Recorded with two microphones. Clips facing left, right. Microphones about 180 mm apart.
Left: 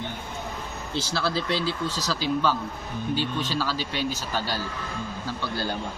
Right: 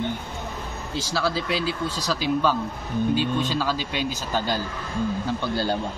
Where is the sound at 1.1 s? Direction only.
10° right (ahead or behind).